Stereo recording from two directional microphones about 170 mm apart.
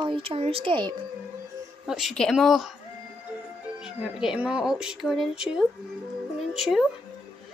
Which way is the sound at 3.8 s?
5° right (ahead or behind).